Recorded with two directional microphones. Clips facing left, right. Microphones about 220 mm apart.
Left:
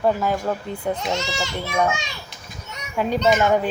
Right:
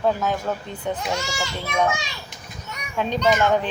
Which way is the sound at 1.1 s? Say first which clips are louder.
Left 2 dB; 20° left (ahead or behind).